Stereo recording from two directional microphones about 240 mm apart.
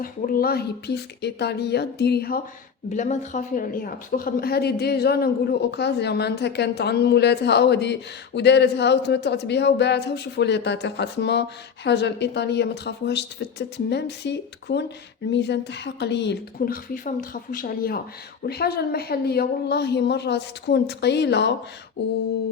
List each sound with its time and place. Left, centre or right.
0.0 s a man's voice: left
2.9 s a man's voice: left